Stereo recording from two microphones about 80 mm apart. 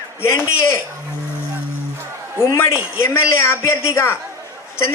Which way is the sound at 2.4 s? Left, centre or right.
Left.